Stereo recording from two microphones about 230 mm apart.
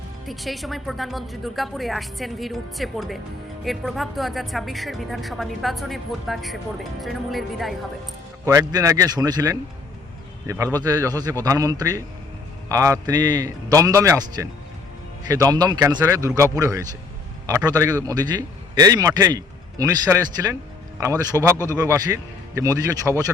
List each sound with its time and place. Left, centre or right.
0.3 s speech: centre
8.4 s a man's voice: centre